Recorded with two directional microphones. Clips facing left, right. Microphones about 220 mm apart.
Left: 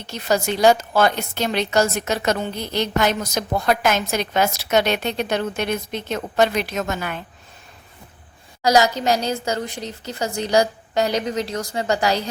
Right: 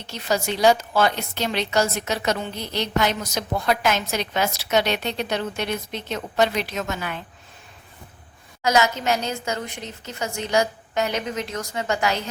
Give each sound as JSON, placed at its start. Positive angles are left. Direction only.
{"t": 0.1, "sound": "a woman's voice", "side_deg": 50}
{"t": 8.6, "sound": "a woman's voice", "side_deg": 35}